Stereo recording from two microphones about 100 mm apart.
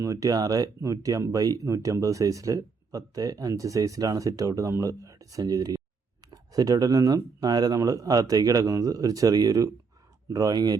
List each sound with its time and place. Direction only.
0.0 s speech: 35° right (ahead or behind)